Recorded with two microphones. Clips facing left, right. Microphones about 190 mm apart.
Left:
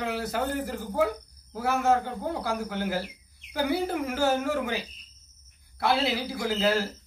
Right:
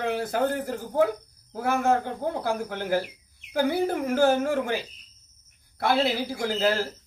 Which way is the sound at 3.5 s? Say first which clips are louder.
Right 3 dB; 55° right (ahead or behind).